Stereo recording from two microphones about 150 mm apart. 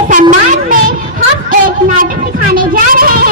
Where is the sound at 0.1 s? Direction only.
60° right (ahead or behind).